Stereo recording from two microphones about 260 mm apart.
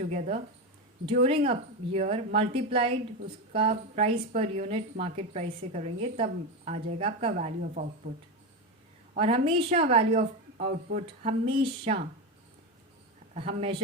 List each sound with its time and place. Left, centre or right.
0.1 s a woman's voice: right
9.1 s a woman's voice: right
13.3 s a woman's voice: right